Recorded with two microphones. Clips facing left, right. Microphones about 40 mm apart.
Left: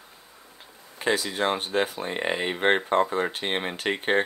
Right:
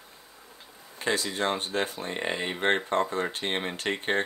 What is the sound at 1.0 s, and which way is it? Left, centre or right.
Speech, centre.